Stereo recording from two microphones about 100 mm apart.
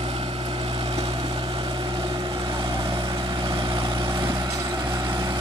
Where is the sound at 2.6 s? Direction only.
50° right (ahead or behind).